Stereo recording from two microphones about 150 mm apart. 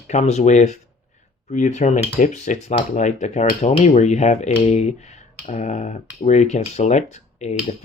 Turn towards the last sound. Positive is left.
turn(degrees=50)  # may be behind; listen again after turning